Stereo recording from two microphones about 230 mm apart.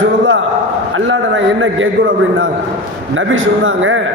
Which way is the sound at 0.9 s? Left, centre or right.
Right.